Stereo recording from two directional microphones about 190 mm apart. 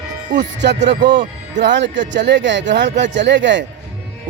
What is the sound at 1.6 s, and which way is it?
Speech, 70° right (ahead or behind).